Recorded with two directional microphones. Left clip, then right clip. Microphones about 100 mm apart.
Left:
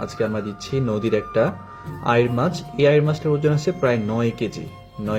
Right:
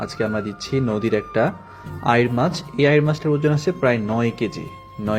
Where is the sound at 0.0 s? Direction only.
30° right (ahead or behind).